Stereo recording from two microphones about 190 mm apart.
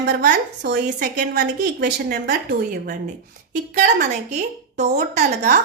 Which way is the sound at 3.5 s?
40° right (ahead or behind).